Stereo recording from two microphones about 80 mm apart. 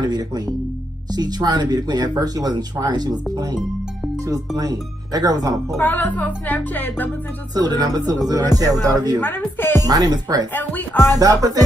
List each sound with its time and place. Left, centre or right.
0.0 s speech: right
4.6 s speech: right
5.8 s music: left
7.5 s speech: right
9.2 s music: left
9.8 s speech: right
10.5 s music: left
11.1 s speech: right